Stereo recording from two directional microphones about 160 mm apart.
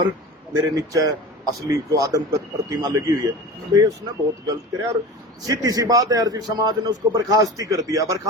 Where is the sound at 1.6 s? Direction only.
20° right (ahead or behind).